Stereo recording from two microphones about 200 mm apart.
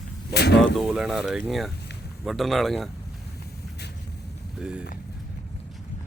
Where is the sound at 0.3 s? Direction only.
55° left (ahead or behind).